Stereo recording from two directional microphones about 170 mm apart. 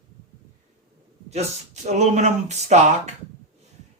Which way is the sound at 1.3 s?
40° right (ahead or behind).